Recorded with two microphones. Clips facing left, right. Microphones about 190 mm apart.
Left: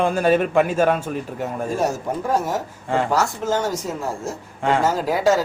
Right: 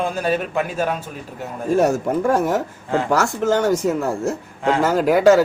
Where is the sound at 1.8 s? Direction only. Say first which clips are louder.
Right 7 dB; 60° right (ahead or behind).